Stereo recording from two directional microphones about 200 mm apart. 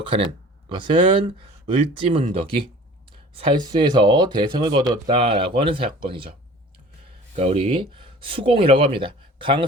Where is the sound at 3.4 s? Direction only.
20° right (ahead or behind).